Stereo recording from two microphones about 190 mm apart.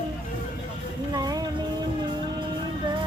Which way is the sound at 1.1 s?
20° right (ahead or behind).